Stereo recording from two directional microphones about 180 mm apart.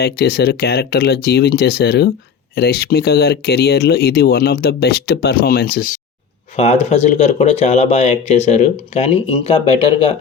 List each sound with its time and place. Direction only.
0.0 s speech: 65° left (ahead or behind)
6.6 s speech: 35° left (ahead or behind)